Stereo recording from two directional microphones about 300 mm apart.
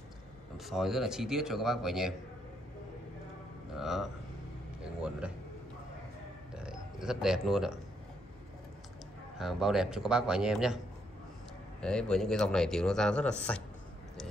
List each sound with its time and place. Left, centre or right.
0.7 s speech: centre
3.7 s speech: centre
6.5 s a sound: centre
9.4 s speech: centre
11.8 s speech: centre